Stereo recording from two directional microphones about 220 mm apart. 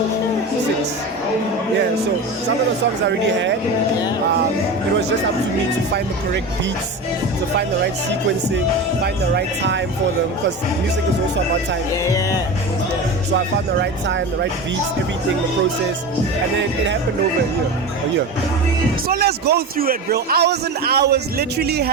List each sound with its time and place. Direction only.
3.2 s a man's voice: 55° right (ahead or behind)
9.3 s a man's voice: 55° right (ahead or behind)
12.0 s speech: 15° left (ahead or behind)
19.0 s a man's voice: 45° right (ahead or behind)